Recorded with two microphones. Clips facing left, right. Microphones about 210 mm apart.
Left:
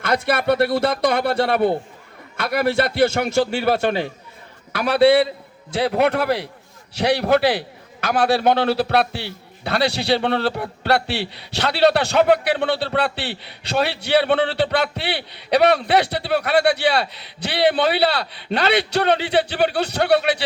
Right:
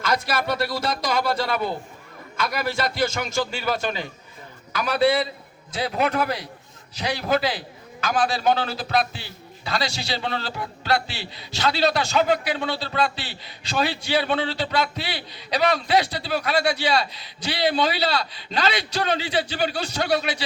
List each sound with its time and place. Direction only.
0.0 s a man's voice: 60° left (ahead or behind)